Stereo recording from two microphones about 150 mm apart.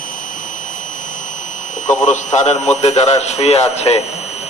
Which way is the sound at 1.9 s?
50° left (ahead or behind).